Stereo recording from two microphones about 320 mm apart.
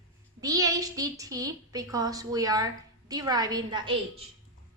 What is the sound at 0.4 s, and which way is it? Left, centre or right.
A woman's voice, centre.